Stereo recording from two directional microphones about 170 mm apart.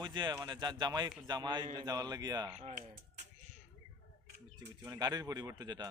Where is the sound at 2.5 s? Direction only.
40° right (ahead or behind).